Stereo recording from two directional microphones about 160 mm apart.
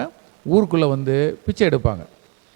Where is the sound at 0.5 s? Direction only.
30° right (ahead or behind).